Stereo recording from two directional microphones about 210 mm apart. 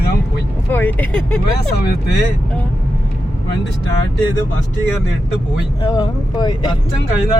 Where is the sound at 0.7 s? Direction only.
5° left (ahead or behind).